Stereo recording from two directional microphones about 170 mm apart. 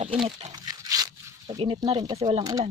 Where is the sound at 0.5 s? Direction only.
20° right (ahead or behind).